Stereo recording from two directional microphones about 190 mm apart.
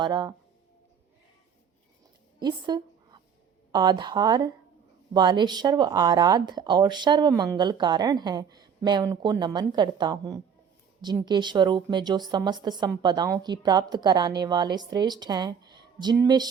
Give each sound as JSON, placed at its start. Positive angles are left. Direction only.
{"t": 0.0, "sound": "speech", "side_deg": -25}
{"t": 2.4, "sound": "a sound", "side_deg": -25}
{"t": 3.7, "sound": "speech", "side_deg": -20}